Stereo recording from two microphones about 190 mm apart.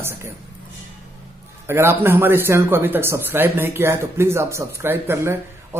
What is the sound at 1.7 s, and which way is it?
Speech, 10° right (ahead or behind).